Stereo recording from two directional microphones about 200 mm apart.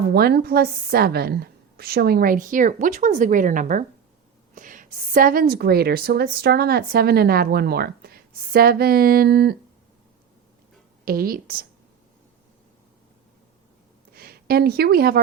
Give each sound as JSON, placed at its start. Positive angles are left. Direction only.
{"t": 0.1, "sound": "a woman's voice", "side_deg": -50}
{"t": 11.0, "sound": "a woman's voice", "side_deg": -45}
{"t": 14.1, "sound": "speech", "side_deg": -50}